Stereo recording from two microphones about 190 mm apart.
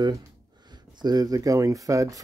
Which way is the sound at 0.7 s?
20° right (ahead or behind).